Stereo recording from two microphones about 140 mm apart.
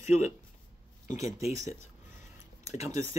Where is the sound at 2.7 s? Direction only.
55° left (ahead or behind).